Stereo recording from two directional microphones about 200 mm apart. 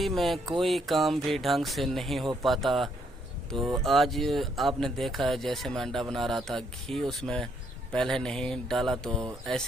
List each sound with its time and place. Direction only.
0.0 s speech: centre (ahead or behind)